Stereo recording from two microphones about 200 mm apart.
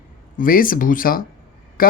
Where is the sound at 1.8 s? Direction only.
45° left (ahead or behind).